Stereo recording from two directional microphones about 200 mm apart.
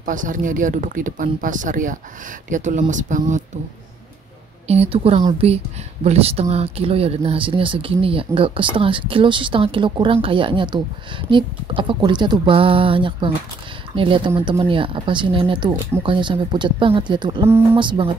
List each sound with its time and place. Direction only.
0.0 s speech: 40° right (ahead or behind)
4.6 s speech: 30° right (ahead or behind)